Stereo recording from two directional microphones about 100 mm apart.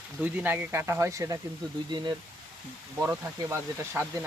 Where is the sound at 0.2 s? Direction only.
15° right (ahead or behind).